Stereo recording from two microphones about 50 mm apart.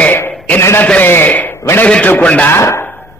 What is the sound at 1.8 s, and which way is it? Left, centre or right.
Speech, left.